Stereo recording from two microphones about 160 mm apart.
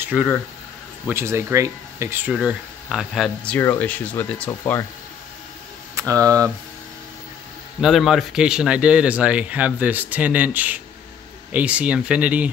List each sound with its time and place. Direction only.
0.1 s speech: 5° right (ahead or behind)
1.0 s speech: 15° right (ahead or behind)
3.4 s speech: 10° left (ahead or behind)
5.9 s speech: 20° right (ahead or behind)
7.8 s speech: centre (ahead or behind)